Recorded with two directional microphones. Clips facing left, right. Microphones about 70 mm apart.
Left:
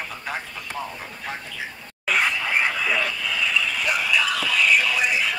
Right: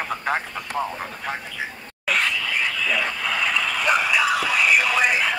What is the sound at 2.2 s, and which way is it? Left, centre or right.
Frog, left.